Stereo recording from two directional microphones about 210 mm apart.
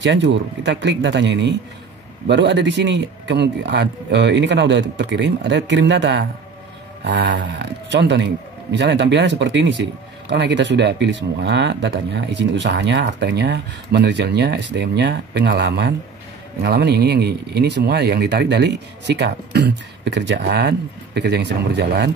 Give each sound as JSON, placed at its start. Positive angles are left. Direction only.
{"t": 0.0, "sound": "speech", "side_deg": -60}